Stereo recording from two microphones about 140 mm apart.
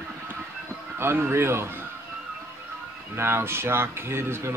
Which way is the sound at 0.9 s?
15° right (ahead or behind).